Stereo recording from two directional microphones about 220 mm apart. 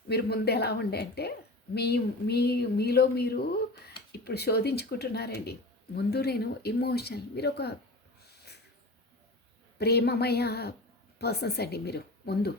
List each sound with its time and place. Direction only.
0.1 s speech: 45° left (ahead or behind)
9.7 s speech: 45° left (ahead or behind)